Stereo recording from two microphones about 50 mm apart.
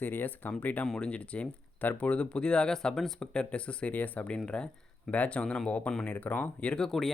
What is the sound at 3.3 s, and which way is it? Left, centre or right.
Speech, left.